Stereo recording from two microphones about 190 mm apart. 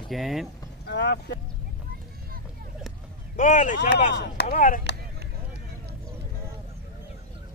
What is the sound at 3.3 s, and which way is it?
Speech, 40° left (ahead or behind).